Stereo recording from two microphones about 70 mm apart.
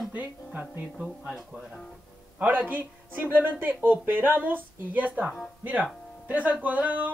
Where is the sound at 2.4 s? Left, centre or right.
Right.